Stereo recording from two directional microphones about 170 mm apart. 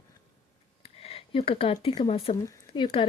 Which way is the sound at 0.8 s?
35° left (ahead or behind).